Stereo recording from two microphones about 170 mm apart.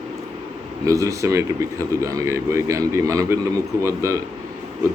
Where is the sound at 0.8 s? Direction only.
20° right (ahead or behind).